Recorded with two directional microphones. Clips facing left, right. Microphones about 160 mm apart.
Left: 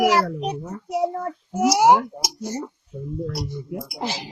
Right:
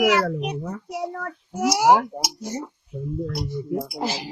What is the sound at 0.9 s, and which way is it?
A child's voice, 20° left (ahead or behind).